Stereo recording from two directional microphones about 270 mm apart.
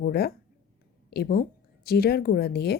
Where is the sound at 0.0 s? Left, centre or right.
Left.